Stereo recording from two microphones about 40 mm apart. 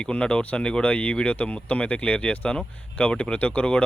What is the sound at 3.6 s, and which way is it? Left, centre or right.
Speech, left.